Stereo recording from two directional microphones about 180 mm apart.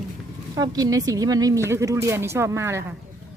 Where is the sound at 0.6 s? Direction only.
20° right (ahead or behind).